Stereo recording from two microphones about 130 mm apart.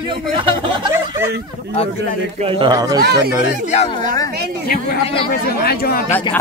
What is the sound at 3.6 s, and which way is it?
Speech, 55° left (ahead or behind).